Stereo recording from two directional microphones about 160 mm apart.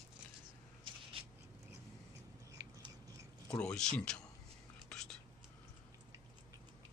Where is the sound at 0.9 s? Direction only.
30° right (ahead or behind).